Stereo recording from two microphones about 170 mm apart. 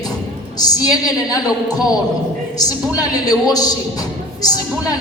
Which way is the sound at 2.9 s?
20° left (ahead or behind).